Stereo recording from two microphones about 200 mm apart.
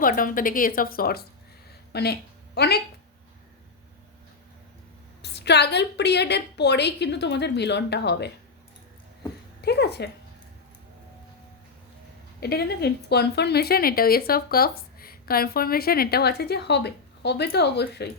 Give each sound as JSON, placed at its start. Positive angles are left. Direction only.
{"t": 0.0, "sound": "speech", "side_deg": 45}
{"t": 5.2, "sound": "a woman's voice", "side_deg": 55}
{"t": 9.6, "sound": "speech", "side_deg": 55}
{"t": 12.4, "sound": "speech", "side_deg": 50}